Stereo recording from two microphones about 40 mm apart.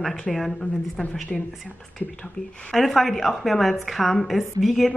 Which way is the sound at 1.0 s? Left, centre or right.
Left.